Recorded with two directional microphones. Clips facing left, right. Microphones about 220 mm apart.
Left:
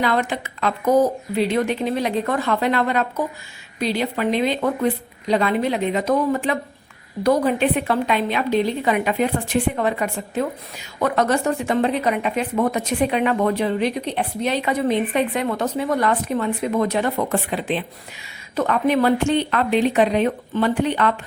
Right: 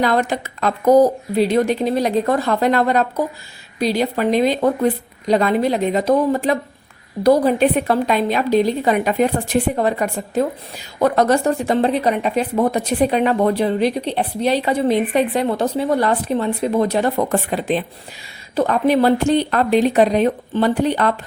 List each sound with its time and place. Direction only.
0.0 s a woman's voice: 40° right (ahead or behind)